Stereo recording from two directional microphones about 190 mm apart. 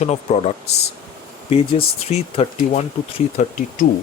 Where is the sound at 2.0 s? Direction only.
35° left (ahead or behind).